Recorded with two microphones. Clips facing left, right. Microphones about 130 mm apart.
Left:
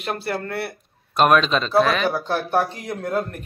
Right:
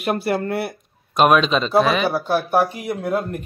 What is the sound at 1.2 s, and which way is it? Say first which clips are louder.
Speech: right 2 dB; 5° right (ahead or behind).